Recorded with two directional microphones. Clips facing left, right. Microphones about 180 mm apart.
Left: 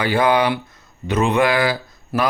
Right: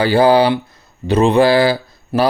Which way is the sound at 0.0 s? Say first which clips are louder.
Right 6 dB; 30° right (ahead or behind).